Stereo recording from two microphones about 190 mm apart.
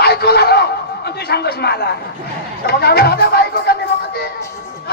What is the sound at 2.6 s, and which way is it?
Speech, 55° left (ahead or behind).